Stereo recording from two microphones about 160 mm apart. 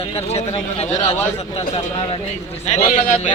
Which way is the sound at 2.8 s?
45° left (ahead or behind).